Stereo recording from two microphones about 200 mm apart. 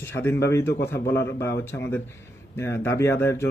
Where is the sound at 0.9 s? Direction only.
55° left (ahead or behind).